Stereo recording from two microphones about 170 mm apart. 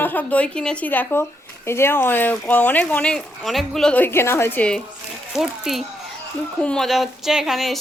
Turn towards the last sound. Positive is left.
turn(degrees=0)  # may be behind; listen again after turning